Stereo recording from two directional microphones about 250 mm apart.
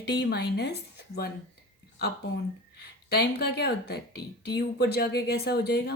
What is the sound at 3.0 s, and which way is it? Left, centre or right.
Speech, left.